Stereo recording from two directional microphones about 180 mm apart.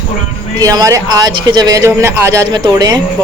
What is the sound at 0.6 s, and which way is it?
A man's voice, 20° right (ahead or behind).